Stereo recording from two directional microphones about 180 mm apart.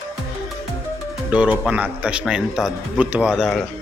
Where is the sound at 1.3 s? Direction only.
5° right (ahead or behind).